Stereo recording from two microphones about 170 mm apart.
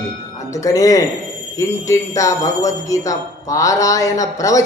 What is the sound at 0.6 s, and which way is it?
A man's voice, 20° left (ahead or behind).